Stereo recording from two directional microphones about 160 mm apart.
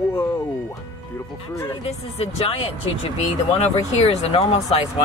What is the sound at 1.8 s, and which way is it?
Speech, 40° left (ahead or behind).